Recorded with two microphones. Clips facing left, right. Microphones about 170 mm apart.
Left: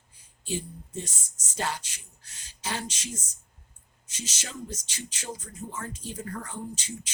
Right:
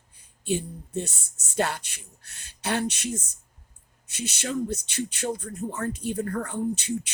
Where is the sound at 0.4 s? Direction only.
60° right (ahead or behind).